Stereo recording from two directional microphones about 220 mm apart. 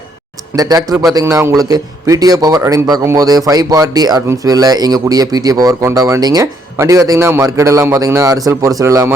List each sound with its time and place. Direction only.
0.5 s speech: 15° right (ahead or behind)